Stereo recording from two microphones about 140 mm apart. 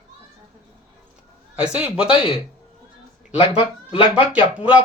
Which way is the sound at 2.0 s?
40° left (ahead or behind).